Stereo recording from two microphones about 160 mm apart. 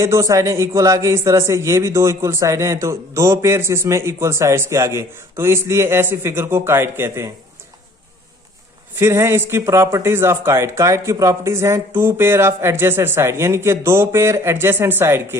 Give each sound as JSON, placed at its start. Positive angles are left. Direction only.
{"t": 0.0, "sound": "a man's voice", "side_deg": -20}
{"t": 9.0, "sound": "a man's voice", "side_deg": -15}